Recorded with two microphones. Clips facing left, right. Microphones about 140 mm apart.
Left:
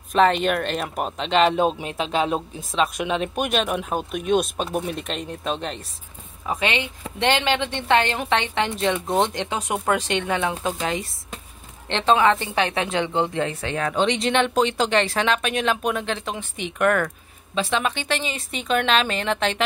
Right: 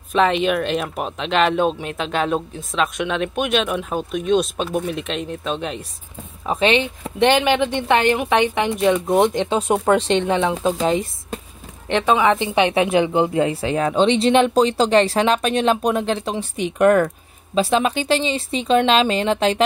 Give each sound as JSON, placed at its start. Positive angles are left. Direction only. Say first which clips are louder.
{"t": 0.1, "sound": "speech", "louder": "right 1 dB", "side_deg": 0}
{"t": 6.4, "sound": "a woman's voice", "louder": "right 7 dB", "side_deg": -25}
{"t": 9.7, "sound": "speech", "louder": "right 6 dB", "side_deg": -30}
{"t": 11.9, "sound": "a woman's voice", "louder": "right 2 dB", "side_deg": -10}
{"t": 13.5, "sound": "speech", "louder": "right 6 dB", "side_deg": -30}